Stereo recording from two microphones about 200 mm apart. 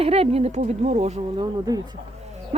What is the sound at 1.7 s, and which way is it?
Speech, 20° right (ahead or behind).